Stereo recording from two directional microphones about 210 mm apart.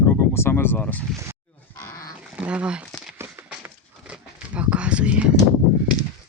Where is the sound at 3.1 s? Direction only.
5° right (ahead or behind).